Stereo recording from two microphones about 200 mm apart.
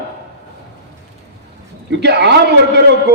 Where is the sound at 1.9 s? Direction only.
60° right (ahead or behind).